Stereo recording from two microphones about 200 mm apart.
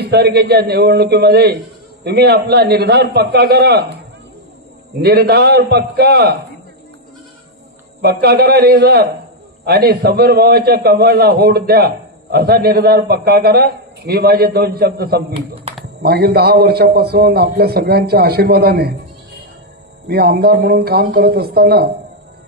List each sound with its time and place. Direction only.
0.0 s a man's voice: 55° right (ahead or behind)
5.0 s a man's voice: 55° right (ahead or behind)
8.0 s a man's voice: 50° right (ahead or behind)
15.3 s a man's voice: 30° right (ahead or behind)
16.0 s a man's voice: 55° right (ahead or behind)
20.1 s a man's voice: 50° right (ahead or behind)